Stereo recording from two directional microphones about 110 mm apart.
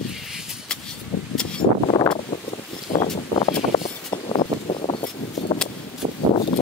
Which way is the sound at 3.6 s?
45° left (ahead or behind).